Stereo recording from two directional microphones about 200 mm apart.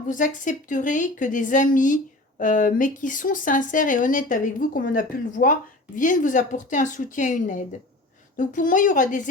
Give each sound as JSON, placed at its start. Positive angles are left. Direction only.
{"t": 0.1, "sound": "speech", "side_deg": 40}